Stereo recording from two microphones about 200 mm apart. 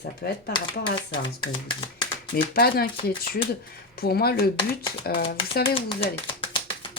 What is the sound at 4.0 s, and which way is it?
Speech, 50° left (ahead or behind).